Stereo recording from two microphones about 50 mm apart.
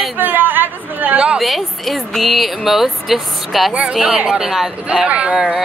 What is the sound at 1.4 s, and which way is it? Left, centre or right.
Speech, centre.